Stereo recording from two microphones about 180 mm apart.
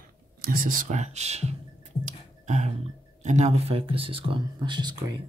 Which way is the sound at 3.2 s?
40° right (ahead or behind).